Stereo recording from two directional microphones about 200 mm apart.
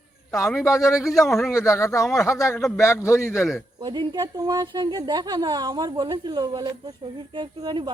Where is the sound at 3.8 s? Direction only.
20° right (ahead or behind).